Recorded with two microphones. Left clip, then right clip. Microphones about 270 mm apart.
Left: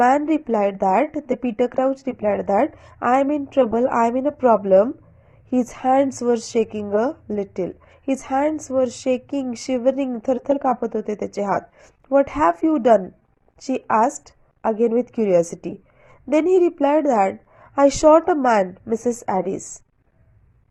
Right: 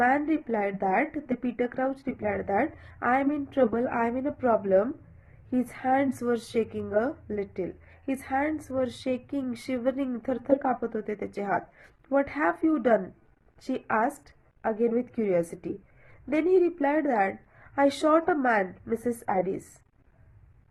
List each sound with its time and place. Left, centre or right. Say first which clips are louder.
0.0 s a woman's voice: left 8 dB; left